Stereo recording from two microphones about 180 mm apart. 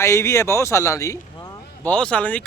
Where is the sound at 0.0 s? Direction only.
15° left (ahead or behind).